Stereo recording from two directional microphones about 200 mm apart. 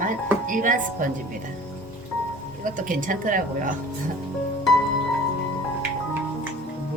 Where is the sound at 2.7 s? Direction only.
40° right (ahead or behind).